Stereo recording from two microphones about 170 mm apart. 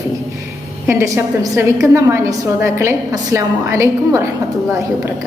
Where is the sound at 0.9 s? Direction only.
15° right (ahead or behind).